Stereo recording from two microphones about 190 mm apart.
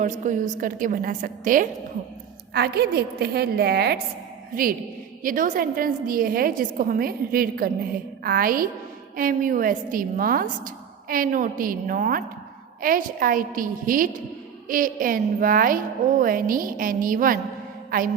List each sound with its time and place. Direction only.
0.0 s a woman's voice: 40° right (ahead or behind)
2.5 s a woman's voice: 60° right (ahead or behind)
5.2 s a woman's voice: 45° right (ahead or behind)